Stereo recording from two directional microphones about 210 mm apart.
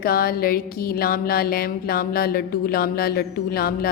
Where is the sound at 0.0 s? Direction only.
45° left (ahead or behind).